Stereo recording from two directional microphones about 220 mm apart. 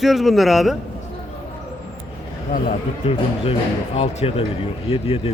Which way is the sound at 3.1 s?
25° left (ahead or behind).